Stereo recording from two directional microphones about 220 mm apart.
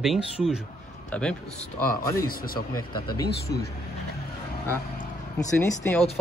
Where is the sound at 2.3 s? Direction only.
40° left (ahead or behind).